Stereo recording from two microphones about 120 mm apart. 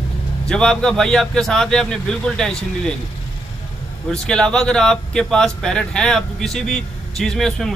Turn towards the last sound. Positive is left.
turn(degrees=5)  # may be behind; listen again after turning